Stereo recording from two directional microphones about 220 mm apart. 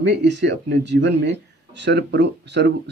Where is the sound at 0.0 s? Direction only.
50° right (ahead or behind).